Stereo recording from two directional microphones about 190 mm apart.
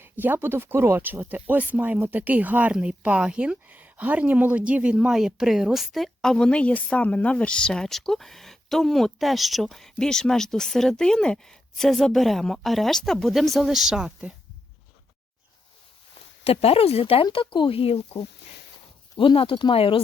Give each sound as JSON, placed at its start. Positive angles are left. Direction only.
{"t": 0.0, "sound": "speech", "side_deg": -10}
{"t": 16.4, "sound": "speech", "side_deg": 30}